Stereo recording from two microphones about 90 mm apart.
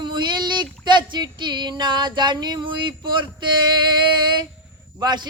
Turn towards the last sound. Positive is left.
turn(degrees=-55)  # may be behind; listen again after turning